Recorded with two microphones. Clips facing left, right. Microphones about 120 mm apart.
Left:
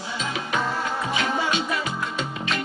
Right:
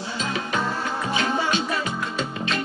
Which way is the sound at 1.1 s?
35° right (ahead or behind).